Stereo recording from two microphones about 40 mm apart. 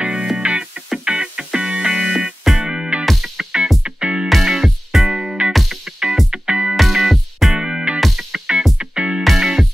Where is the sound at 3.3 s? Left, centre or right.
Right.